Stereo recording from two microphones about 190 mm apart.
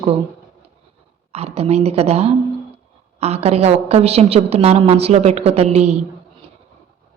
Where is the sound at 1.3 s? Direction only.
35° right (ahead or behind).